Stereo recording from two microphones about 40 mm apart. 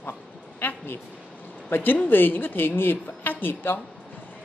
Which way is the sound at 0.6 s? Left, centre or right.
Left.